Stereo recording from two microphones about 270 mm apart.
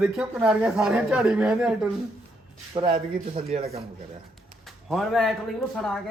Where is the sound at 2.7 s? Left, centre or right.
Right.